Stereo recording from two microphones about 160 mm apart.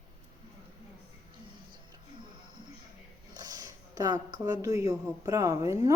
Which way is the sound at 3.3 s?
25° right (ahead or behind).